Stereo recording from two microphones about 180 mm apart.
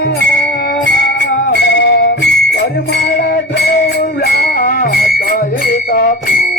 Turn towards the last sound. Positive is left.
turn(degrees=55)  # may be behind; listen again after turning